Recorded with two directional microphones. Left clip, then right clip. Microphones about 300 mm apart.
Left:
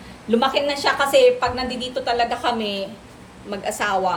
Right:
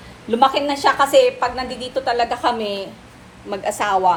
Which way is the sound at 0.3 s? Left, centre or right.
Right.